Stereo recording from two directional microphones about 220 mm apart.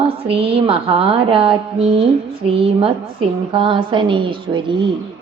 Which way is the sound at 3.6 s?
20° right (ahead or behind).